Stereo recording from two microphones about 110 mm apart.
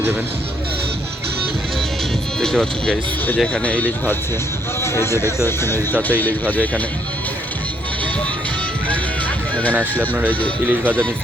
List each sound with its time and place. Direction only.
2.4 s speech: 5° left (ahead or behind)
10.0 s speech: 15° right (ahead or behind)